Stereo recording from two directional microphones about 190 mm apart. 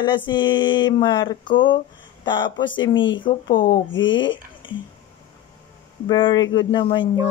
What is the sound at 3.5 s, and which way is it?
Speech, 50° left (ahead or behind).